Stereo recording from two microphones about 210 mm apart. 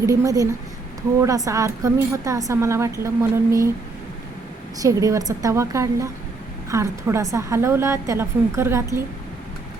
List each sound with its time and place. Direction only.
0.0 s a woman's voice: 15° right (ahead or behind)
4.8 s a woman's voice: 15° right (ahead or behind)